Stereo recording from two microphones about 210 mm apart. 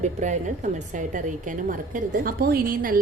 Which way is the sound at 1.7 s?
40° right (ahead or behind).